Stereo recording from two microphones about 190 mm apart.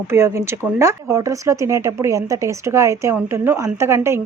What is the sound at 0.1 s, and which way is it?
Speech, 15° right (ahead or behind).